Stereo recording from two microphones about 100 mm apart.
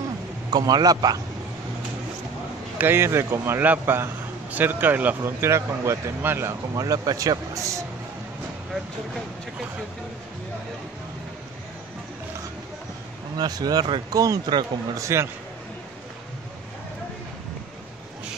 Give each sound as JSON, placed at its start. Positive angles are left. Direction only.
{"t": 0.5, "sound": "speech", "side_deg": -40}
{"t": 2.8, "sound": "a man's voice", "side_deg": -25}
{"t": 5.2, "sound": "a man's voice", "side_deg": -25}
{"t": 6.7, "sound": "speech", "side_deg": -40}
{"t": 13.4, "sound": "speech", "side_deg": -40}
{"t": 14.1, "sound": "a man's voice", "side_deg": -35}